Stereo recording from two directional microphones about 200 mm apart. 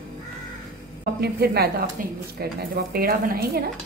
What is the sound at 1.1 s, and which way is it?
A woman's voice, 50° right (ahead or behind).